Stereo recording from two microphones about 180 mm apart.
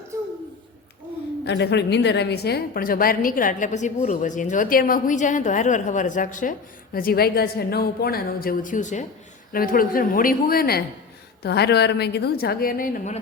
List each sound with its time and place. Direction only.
1.5 s a woman's voice: 70° left (ahead or behind); by 9.0 s 40° left (ahead or behind)
9.5 s a woman's voice: 55° left (ahead or behind)